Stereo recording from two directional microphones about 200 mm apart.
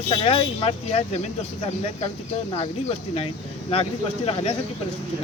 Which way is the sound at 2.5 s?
30° left (ahead or behind).